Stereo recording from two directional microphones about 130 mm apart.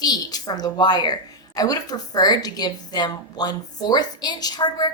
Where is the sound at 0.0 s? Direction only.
30° left (ahead or behind).